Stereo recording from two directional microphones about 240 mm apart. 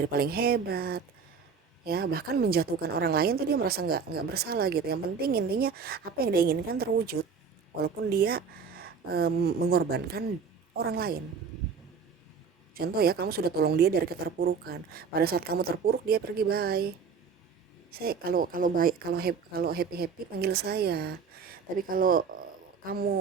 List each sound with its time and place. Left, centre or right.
0.1 s a woman's voice: right
12.7 s a woman's voice: right
17.9 s a woman's voice: right